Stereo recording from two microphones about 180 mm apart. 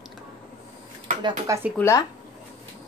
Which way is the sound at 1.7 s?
15° left (ahead or behind).